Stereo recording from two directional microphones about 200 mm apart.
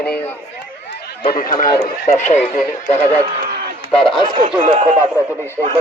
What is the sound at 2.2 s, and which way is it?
Speech, 35° left (ahead or behind).